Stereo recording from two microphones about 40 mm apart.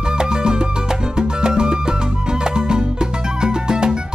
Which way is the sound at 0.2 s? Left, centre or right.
Centre.